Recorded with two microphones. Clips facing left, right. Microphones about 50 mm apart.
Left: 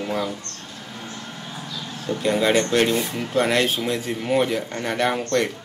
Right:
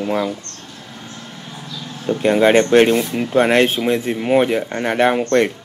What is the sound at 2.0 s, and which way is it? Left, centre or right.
Speech, right.